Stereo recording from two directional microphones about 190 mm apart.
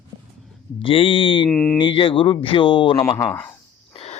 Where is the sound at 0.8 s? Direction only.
30° left (ahead or behind).